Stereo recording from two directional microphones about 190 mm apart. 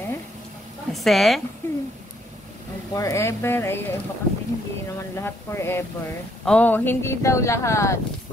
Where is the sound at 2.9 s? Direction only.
15° left (ahead or behind).